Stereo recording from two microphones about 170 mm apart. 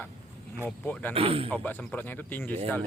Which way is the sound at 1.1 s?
35° right (ahead or behind).